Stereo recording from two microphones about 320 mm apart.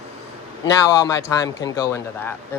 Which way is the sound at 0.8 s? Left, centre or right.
Centre.